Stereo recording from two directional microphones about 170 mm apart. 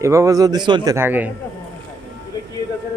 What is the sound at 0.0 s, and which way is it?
Speech, 15° right (ahead or behind).